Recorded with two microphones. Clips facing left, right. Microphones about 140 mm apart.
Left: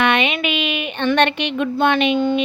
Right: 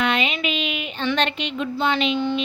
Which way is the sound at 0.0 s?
70° left (ahead or behind).